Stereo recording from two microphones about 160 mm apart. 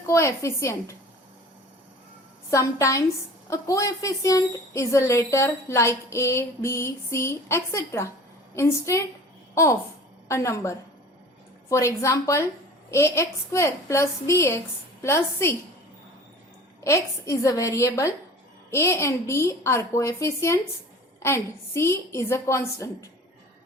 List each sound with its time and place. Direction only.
0.0 s a woman's voice: 15° left (ahead or behind)
2.5 s a woman's voice: 20° left (ahead or behind)
10.2 s a woman's voice: 15° left (ahead or behind)
16.8 s a woman's voice: 20° left (ahead or behind)